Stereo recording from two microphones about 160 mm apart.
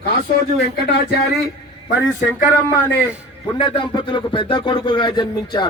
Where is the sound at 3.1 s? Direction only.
20° left (ahead or behind).